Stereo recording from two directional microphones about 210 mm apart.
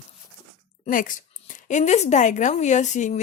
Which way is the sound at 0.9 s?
40° left (ahead or behind).